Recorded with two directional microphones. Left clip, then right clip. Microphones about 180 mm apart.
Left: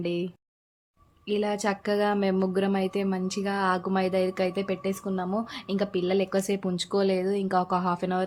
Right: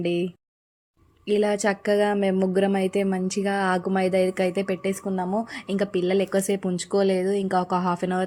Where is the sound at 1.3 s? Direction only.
25° right (ahead or behind).